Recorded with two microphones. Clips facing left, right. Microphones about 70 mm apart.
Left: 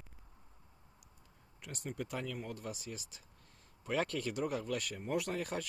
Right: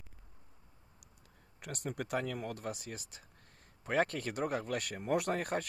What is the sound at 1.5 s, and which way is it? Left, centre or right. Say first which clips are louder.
Speech: right 3 dB; right.